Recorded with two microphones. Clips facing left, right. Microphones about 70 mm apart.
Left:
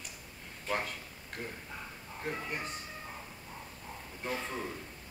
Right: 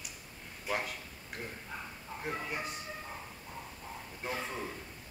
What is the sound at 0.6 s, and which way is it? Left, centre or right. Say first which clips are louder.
A man's voice: left 1 dB; centre.